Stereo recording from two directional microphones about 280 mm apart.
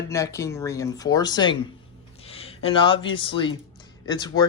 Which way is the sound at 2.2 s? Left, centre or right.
Left.